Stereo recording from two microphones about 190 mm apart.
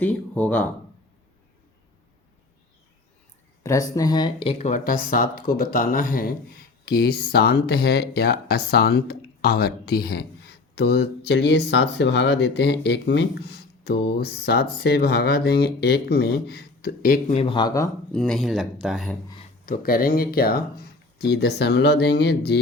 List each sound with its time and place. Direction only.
0.0 s speech: 10° left (ahead or behind)
3.6 s speech: 15° left (ahead or behind); by 17.3 s 50° left (ahead or behind)
17.3 s speech: 25° left (ahead or behind)
18.1 s speech: centre (ahead or behind)
19.6 s speech: 50° left (ahead or behind)